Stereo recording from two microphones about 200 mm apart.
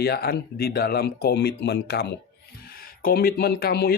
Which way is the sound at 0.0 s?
50° left (ahead or behind).